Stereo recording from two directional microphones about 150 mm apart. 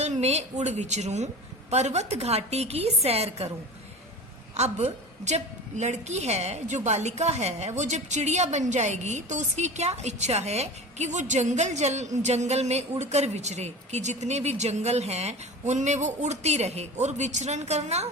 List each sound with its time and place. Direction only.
0.0 s a woman's voice: 50° right (ahead or behind)
4.5 s a woman's voice: 45° right (ahead or behind)